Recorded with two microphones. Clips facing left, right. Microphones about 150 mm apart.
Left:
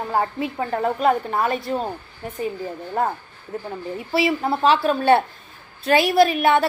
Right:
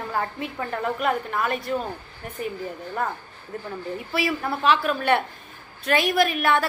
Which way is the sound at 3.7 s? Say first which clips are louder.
Left 2 dB; 25° left (ahead or behind).